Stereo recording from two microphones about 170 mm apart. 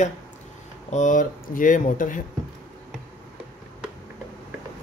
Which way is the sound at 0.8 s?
45° left (ahead or behind).